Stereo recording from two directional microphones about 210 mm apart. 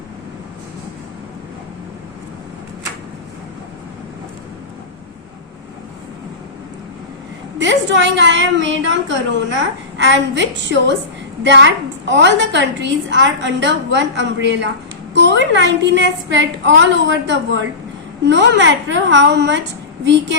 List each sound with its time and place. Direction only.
7.6 s a woman's voice: 60° right (ahead or behind)